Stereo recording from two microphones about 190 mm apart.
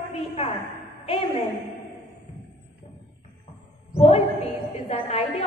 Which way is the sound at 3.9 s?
30° left (ahead or behind).